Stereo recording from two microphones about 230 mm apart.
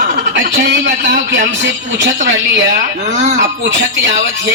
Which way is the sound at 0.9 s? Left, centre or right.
Right.